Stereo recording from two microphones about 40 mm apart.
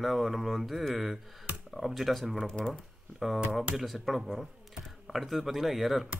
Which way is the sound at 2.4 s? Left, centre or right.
Centre.